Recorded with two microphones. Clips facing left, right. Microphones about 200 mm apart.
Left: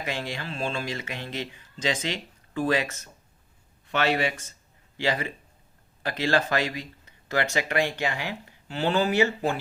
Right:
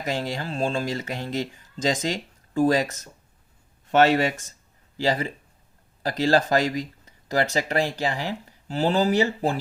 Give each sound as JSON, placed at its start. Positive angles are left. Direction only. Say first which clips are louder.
{"t": 0.0, "sound": "speech", "louder": "right 4 dB", "side_deg": -40}